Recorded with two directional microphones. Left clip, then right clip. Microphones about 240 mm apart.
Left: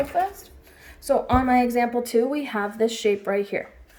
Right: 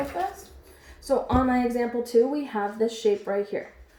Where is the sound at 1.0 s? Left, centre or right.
Left.